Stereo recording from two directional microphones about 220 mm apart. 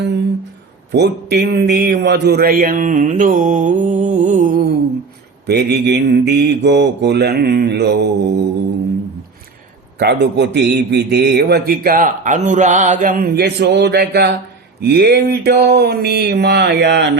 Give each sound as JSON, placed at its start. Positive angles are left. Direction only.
{"t": 0.9, "sound": "a man's voice", "side_deg": -50}
{"t": 5.5, "sound": "speech", "side_deg": -45}
{"t": 10.0, "sound": "speech", "side_deg": -50}